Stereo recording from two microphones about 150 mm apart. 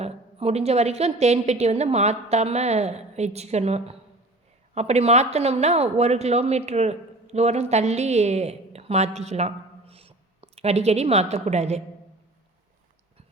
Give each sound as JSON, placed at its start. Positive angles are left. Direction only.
{"t": 0.0, "sound": "a woman's voice", "side_deg": -45}